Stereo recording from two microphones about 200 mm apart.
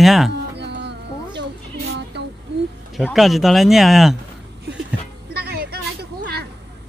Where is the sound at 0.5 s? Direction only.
60° right (ahead or behind).